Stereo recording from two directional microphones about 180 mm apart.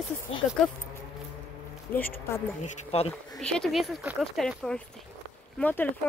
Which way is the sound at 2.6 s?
35° left (ahead or behind).